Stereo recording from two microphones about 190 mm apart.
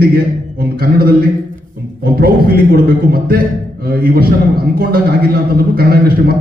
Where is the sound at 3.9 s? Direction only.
50° right (ahead or behind).